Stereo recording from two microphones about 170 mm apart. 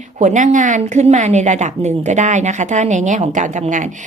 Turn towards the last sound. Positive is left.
turn(degrees=-45)  # may be behind; listen again after turning